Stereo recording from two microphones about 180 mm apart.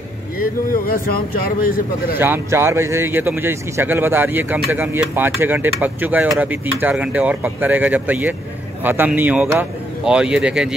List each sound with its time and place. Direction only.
0.4 s speech: 55° left (ahead or behind)
2.1 s speech: 10° right (ahead or behind)